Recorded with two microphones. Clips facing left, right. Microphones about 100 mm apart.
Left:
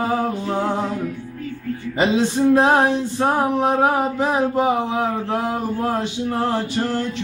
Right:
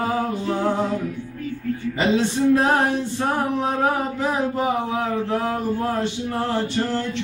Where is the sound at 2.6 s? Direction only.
20° left (ahead or behind).